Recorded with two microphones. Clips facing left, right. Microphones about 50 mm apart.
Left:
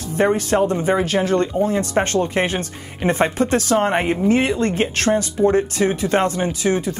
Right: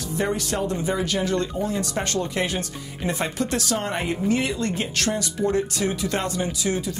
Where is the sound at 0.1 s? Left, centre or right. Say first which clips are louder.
Left 8 dB; left.